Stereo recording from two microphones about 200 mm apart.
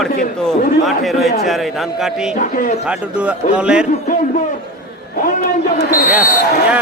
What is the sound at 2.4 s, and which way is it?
Speech, 40° left (ahead or behind).